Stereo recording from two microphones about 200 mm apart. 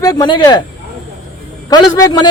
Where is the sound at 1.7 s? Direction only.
20° left (ahead or behind).